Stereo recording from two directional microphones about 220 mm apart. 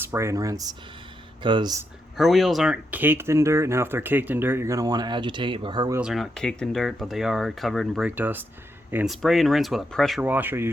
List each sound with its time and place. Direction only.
0.0 s speech: 10° right (ahead or behind)
2.1 s speech: centre (ahead or behind); by 6.0 s 20° right (ahead or behind)
6.0 s speech: centre (ahead or behind)